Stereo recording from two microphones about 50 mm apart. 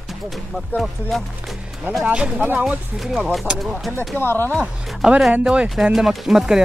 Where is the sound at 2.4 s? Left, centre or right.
Right.